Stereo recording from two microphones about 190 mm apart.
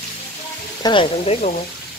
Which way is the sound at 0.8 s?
25° left (ahead or behind).